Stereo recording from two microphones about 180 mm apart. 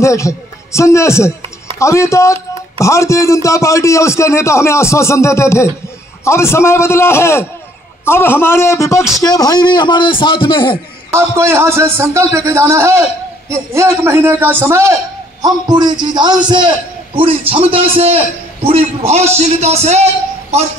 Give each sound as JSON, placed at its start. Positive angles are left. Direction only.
{"t": 0.0, "sound": "a man's voice", "side_deg": 15}
{"t": 11.1, "sound": "a man's voice", "side_deg": -15}